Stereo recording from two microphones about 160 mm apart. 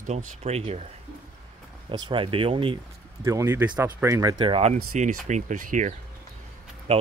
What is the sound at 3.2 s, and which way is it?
Speech, 15° right (ahead or behind).